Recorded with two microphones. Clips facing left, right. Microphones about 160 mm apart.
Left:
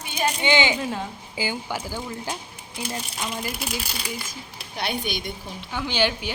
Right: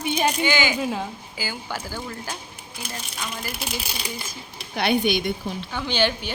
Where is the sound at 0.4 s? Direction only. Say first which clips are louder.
Left 1 dB; 25° left (ahead or behind).